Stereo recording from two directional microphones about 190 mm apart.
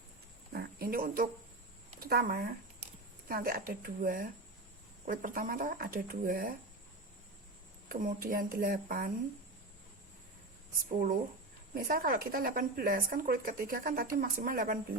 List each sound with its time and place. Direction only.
0.5 s a sound: 55° right (ahead or behind)
2.0 s a woman's voice: 50° right (ahead or behind)
7.9 s a woman's voice: 45° right (ahead or behind)
11.7 s a woman's voice: 50° right (ahead or behind)